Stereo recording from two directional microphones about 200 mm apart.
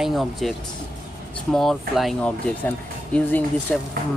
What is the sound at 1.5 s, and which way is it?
Speech, centre (ahead or behind).